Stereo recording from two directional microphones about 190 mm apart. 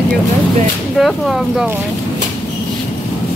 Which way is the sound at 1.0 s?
Centre (ahead or behind).